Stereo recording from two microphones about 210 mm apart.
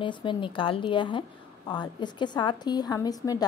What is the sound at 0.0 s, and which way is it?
Speech, 25° left (ahead or behind).